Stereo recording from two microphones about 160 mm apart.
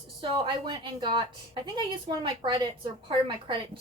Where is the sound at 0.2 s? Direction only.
30° right (ahead or behind).